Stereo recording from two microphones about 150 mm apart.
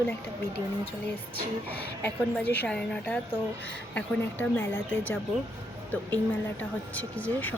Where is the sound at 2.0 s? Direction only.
10° left (ahead or behind).